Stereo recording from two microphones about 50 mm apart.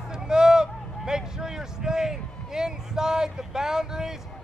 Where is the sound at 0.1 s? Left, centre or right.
Centre.